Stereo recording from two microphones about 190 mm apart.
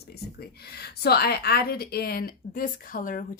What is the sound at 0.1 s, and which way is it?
A woman's voice, 55° left (ahead or behind).